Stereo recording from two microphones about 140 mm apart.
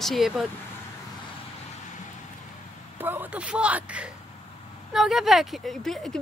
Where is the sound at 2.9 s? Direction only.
15° right (ahead or behind).